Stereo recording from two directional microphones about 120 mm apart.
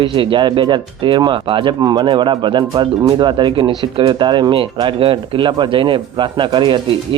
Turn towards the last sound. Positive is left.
turn(degrees=-40)  # may be behind; listen again after turning